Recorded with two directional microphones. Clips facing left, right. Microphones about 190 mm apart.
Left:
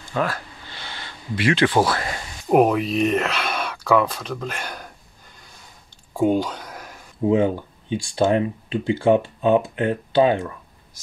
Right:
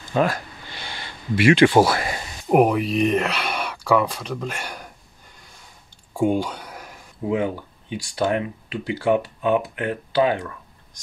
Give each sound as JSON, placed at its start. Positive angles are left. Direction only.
{"t": 0.1, "sound": "a sound", "side_deg": -20}
{"t": 3.2, "sound": "speech", "side_deg": -10}
{"t": 6.3, "sound": "speech", "side_deg": -10}
{"t": 7.2, "sound": "speech", "side_deg": 25}